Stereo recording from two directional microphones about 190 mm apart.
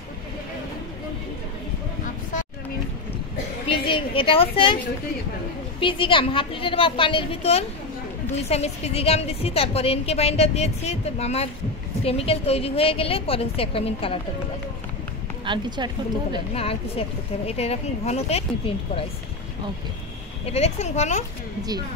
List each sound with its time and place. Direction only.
3.6 s a woman's voice: 30° left (ahead or behind)
5.8 s a woman's voice: 25° left (ahead or behind)
15.4 s a woman's voice: 25° right (ahead or behind)
16.5 s a woman's voice: 30° left (ahead or behind)
20.4 s a woman's voice: 35° left (ahead or behind)